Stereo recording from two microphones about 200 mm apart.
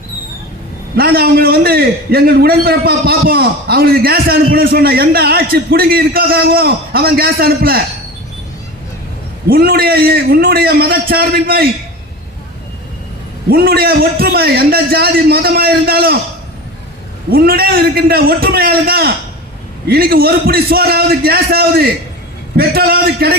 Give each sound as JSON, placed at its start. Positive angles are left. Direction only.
{"t": 0.9, "sound": "a man's voice", "side_deg": -50}
{"t": 9.5, "sound": "a man's voice", "side_deg": -50}
{"t": 13.5, "sound": "a man's voice", "side_deg": -50}
{"t": 17.3, "sound": "a man's voice", "side_deg": -50}